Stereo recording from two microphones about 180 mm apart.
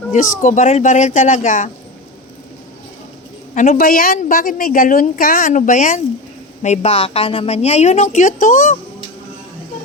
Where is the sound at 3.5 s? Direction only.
45° left (ahead or behind).